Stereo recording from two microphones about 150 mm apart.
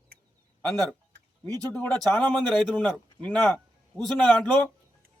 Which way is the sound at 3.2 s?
10° left (ahead or behind).